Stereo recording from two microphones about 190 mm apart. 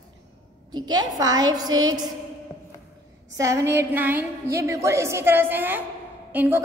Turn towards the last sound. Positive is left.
turn(degrees=-10)  # may be behind; listen again after turning